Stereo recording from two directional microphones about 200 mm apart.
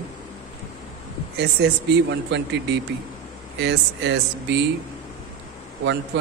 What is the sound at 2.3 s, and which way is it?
A man's voice, 60° right (ahead or behind).